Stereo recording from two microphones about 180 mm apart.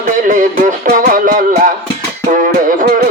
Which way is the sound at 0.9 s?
45° right (ahead or behind).